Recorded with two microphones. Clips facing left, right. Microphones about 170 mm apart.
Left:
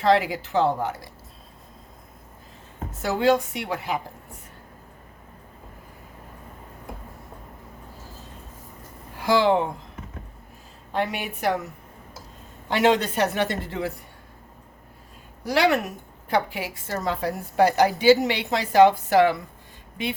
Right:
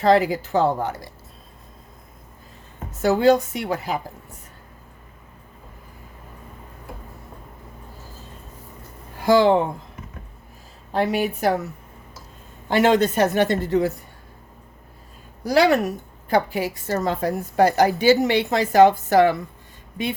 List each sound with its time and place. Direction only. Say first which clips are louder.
0.0 s a woman's voice: right 3 dB; 40° right (ahead or behind)
3.1 s a woman's voice: right 4 dB; 40° right (ahead or behind)
9.2 s a woman's voice: right 4 dB; 45° right (ahead or behind)
10.9 s a woman's voice: right 6 dB; 35° right (ahead or behind)
12.7 s a woman's voice: right 3 dB; 45° right (ahead or behind)
15.4 s a woman's voice: right 4 dB; 40° right (ahead or behind)